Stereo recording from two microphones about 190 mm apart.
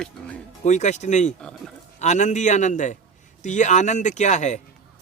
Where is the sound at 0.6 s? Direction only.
40° left (ahead or behind).